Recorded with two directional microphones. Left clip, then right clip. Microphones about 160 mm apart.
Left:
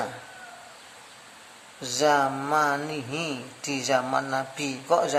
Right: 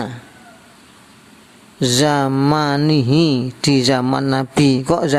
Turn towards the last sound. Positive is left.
turn(degrees=-50)  # may be behind; listen again after turning